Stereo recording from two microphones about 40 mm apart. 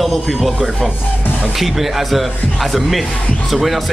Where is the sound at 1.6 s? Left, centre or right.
Centre.